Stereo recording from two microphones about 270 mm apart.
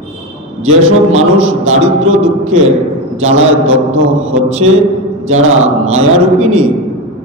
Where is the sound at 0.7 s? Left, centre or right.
Right.